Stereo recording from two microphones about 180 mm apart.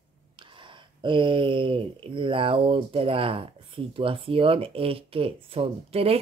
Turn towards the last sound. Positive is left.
turn(degrees=-35)  # may be behind; listen again after turning